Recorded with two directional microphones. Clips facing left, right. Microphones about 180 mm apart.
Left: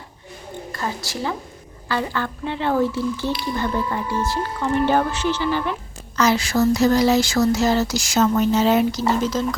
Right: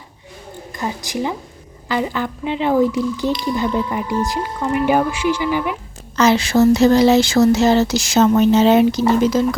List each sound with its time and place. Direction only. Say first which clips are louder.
0.7 s speech: right 4 dB; 15° right (ahead or behind)
6.1 s speech: right 5 dB; 25° right (ahead or behind)